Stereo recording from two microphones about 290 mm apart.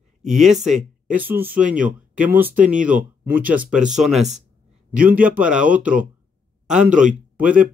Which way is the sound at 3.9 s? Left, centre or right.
Centre.